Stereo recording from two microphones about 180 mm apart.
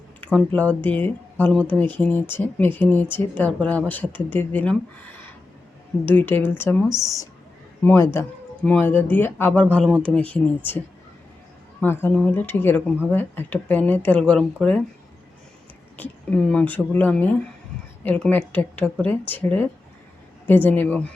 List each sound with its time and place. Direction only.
0.2 s speech: 10° left (ahead or behind)
11.8 s speech: 10° left (ahead or behind)
16.0 s speech: 5° left (ahead or behind)